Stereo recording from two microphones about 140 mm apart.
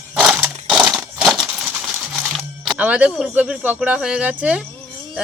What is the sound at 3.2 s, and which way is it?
Speech, 10° right (ahead or behind).